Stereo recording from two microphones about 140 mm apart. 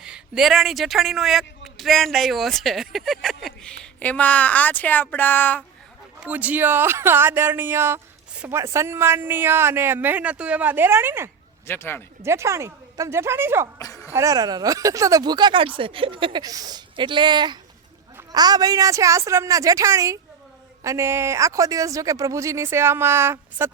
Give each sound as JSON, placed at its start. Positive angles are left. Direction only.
{"t": 0.0, "sound": "speech", "side_deg": -5}
{"t": 6.1, "sound": "speech", "side_deg": -10}
{"t": 11.6, "sound": "speech", "side_deg": 15}
{"t": 12.2, "sound": "speech", "side_deg": -20}
{"t": 13.7, "sound": "music", "side_deg": 20}
{"t": 14.1, "sound": "speech", "side_deg": -20}